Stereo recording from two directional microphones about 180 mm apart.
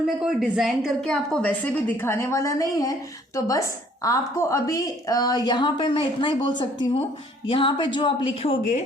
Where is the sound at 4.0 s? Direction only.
15° left (ahead or behind); by 8.8 s 35° left (ahead or behind).